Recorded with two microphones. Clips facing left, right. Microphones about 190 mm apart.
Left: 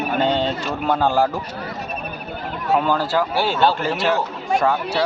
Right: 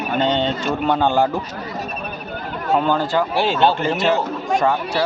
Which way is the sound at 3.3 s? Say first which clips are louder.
Right 2 dB; 20° right (ahead or behind).